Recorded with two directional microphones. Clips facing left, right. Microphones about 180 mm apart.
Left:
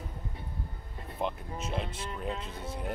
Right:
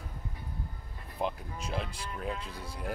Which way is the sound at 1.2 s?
Centre (ahead or behind).